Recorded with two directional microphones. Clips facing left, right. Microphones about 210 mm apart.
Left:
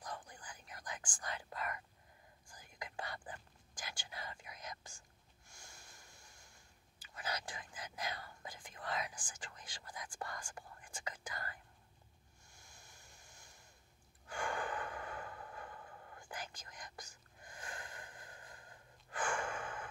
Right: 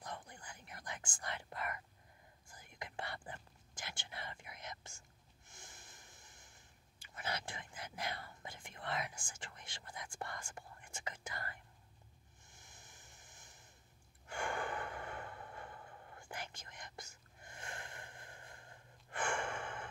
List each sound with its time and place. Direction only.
0.0 s whispering: 25° right (ahead or behind)
5.5 s a sound: 20° right (ahead or behind)
7.0 s whispering: 25° right (ahead or behind)
12.4 s a sound: 20° right (ahead or behind)
14.2 s gasp: 25° right (ahead or behind)
16.2 s whispering: 25° right (ahead or behind)